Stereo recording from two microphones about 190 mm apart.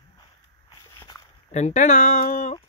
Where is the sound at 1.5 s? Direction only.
40° left (ahead or behind).